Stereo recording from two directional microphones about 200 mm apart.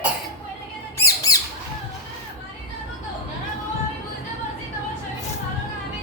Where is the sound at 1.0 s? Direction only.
15° left (ahead or behind).